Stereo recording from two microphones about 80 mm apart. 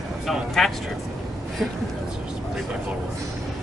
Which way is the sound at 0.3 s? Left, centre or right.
Centre.